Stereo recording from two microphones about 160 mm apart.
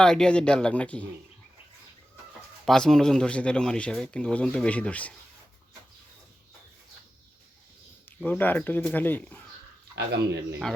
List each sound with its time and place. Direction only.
0.0 s speech: 5° left (ahead or behind)
2.6 s speech: 5° left (ahead or behind)
8.2 s speech: 10° left (ahead or behind)
9.9 s speech: 90° right